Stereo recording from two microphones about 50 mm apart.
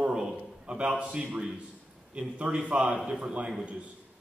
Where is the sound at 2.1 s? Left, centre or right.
Right.